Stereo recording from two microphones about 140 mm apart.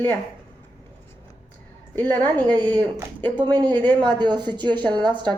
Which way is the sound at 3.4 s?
30° right (ahead or behind).